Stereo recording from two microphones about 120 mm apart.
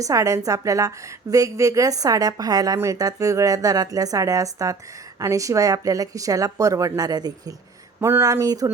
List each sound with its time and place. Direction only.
0.0 s a woman's voice: 25° right (ahead or behind)